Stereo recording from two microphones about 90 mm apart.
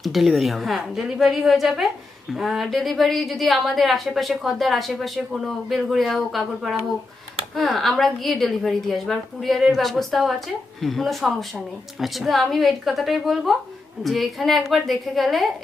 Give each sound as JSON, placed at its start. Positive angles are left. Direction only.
{"t": 0.0, "sound": "a woman's voice", "side_deg": 0}